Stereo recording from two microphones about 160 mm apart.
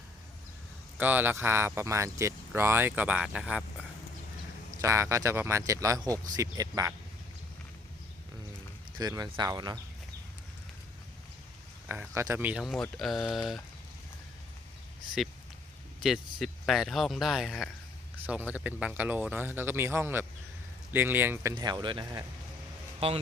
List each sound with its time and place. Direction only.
0.9 s speech: 10° right (ahead or behind)
4.8 s speech: 20° right (ahead or behind)
9.0 s speech: 25° right (ahead or behind)
11.9 s speech: 15° right (ahead or behind)
16.0 s speech: centre (ahead or behind)
21.5 s speech: 25° right (ahead or behind)